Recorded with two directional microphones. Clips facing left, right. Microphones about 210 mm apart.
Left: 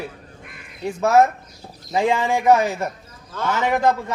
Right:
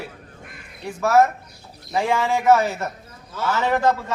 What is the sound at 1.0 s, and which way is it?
A man's voice, 20° left (ahead or behind).